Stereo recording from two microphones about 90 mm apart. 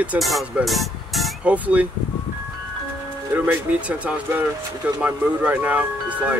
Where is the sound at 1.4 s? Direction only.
15° right (ahead or behind).